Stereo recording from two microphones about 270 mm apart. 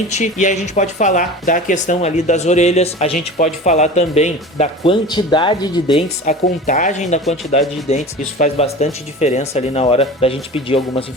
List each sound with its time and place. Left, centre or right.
0.1 s speech: left
6.2 s speech: left